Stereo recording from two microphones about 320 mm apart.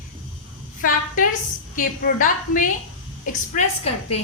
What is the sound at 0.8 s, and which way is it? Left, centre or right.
A woman's voice, left.